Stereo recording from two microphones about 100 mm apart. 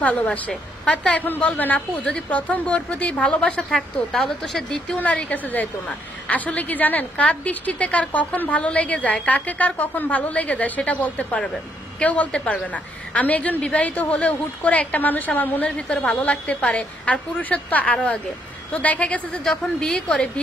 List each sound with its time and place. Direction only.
0.0 s a woman's voice: 15° left (ahead or behind)